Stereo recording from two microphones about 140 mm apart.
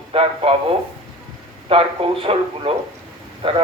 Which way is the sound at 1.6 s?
40° right (ahead or behind).